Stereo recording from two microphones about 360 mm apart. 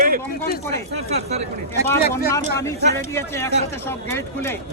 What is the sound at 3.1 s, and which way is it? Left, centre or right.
Speech, centre.